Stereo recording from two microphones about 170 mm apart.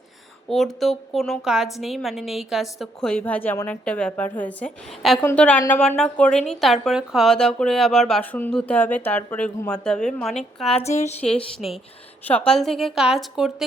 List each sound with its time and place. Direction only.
0.4 s a woman's voice: centre (ahead or behind)
10.8 s a woman's voice: 40° left (ahead or behind)
11.3 s a woman's voice: 5° left (ahead or behind)